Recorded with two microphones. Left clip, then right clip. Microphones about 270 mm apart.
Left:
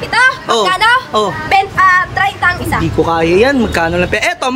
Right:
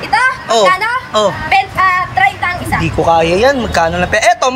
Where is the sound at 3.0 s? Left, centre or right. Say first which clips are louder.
Right 2 dB; centre.